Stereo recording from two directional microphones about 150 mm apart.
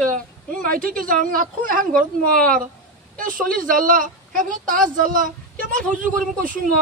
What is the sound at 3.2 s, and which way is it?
A woman's voice, 65° right (ahead or behind).